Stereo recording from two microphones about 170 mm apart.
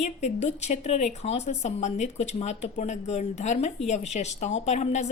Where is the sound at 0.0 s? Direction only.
40° left (ahead or behind).